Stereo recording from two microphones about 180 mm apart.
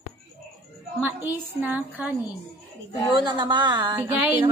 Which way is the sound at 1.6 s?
10° right (ahead or behind).